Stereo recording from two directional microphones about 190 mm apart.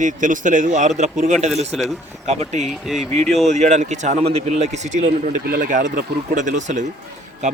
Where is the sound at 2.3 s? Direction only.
35° right (ahead or behind).